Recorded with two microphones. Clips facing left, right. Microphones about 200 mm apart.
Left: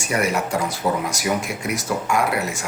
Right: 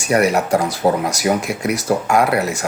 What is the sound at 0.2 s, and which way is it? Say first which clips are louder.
Speech: right 5 dB; 40° right (ahead or behind).